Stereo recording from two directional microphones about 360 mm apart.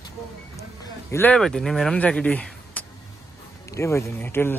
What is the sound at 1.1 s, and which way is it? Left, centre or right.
Speech, centre.